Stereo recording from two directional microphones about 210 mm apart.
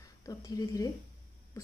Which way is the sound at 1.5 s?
15° left (ahead or behind).